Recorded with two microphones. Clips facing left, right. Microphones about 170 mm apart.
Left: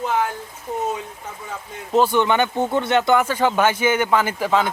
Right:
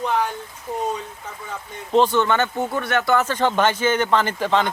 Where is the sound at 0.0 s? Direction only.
5° left (ahead or behind).